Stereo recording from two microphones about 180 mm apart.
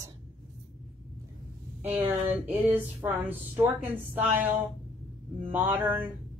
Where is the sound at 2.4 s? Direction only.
10° right (ahead or behind).